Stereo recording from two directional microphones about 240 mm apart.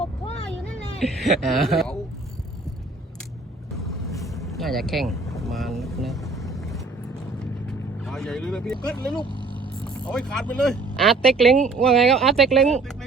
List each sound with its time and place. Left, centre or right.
0.9 s speech: centre
4.2 s vehicle: centre
5.4 s speech: centre
6.5 s vehicle: centre
9.4 s vehicle: centre
9.8 s speech: centre